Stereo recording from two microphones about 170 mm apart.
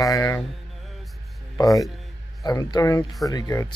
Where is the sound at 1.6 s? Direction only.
20° left (ahead or behind).